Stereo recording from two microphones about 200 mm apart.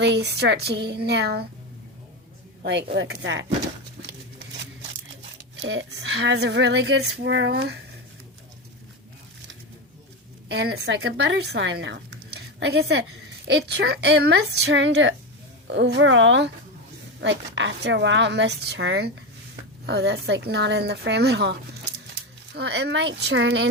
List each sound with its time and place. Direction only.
0.0 s speech: 60° right (ahead or behind)
2.9 s speech: 60° right (ahead or behind)
5.5 s speech: 65° right (ahead or behind)
10.5 s speech: 55° right (ahead or behind)
22.5 s speech: 55° right (ahead or behind)